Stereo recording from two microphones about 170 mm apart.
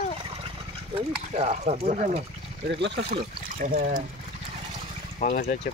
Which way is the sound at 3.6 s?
45° right (ahead or behind).